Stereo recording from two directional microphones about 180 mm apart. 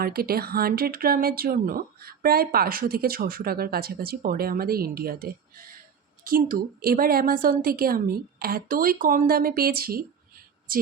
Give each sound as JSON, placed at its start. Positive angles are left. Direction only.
{"t": 0.0, "sound": "speech", "side_deg": -55}